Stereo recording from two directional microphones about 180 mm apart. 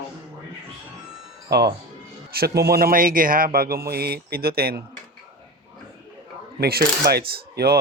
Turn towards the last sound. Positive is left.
turn(degrees=-60)  # may be behind; listen again after turning